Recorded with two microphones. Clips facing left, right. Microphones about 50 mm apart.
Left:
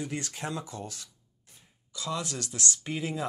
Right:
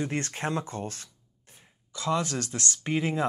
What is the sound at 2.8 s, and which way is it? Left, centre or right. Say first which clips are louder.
Speech: right 9 dB; right.